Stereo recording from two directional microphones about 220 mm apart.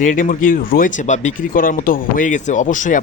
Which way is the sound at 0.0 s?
35° left (ahead or behind).